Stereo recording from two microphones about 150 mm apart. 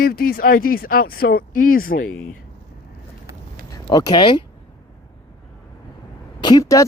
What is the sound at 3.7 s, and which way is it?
Speech, 25° left (ahead or behind).